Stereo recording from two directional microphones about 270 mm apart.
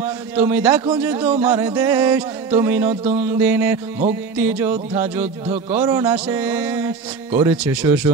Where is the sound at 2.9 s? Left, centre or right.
Right.